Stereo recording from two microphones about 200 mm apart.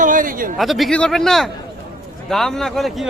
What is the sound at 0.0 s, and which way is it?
Speech, 40° right (ahead or behind).